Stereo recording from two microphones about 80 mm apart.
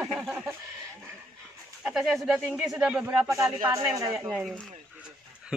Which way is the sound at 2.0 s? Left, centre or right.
Centre.